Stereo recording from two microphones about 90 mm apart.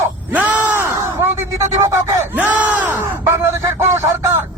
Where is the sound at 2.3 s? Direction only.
20° right (ahead or behind).